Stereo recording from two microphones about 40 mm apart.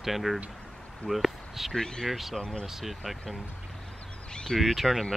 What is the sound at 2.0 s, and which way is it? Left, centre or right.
Speech, centre.